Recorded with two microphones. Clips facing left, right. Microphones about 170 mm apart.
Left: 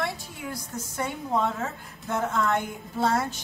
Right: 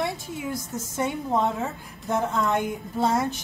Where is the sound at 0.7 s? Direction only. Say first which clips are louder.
Right 4 dB; 20° right (ahead or behind).